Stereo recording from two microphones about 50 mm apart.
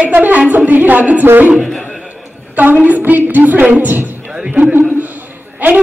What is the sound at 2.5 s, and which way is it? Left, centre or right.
A man's voice, right.